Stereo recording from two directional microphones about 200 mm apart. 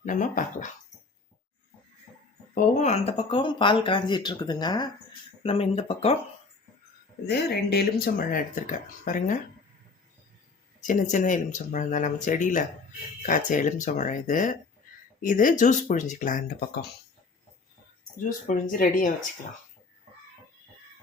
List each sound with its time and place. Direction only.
0.0 s speech: 40° left (ahead or behind)
2.6 s speech: 35° left (ahead or behind)
7.3 s speech: 55° left (ahead or behind)
10.8 s speech: 40° left (ahead or behind)
18.4 s speech: 45° left (ahead or behind)